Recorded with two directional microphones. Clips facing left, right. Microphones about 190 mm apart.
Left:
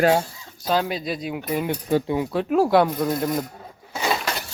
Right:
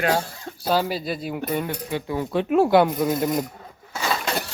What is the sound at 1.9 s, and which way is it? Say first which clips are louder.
Speech: left 9 dB; 40° left (ahead or behind).